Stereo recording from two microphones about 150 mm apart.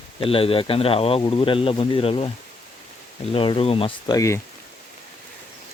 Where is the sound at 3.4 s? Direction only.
35° left (ahead or behind).